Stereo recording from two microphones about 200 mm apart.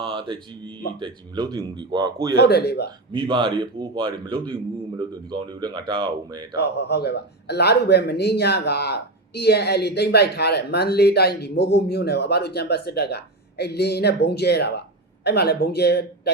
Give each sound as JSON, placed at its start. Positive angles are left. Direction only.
{"t": 0.0, "sound": "mantra", "side_deg": -25}
{"t": 0.9, "sound": "speech", "side_deg": -20}
{"t": 2.3, "sound": "speech", "side_deg": 55}
{"t": 3.1, "sound": "speech", "side_deg": -25}
{"t": 6.6, "sound": "speech", "side_deg": 55}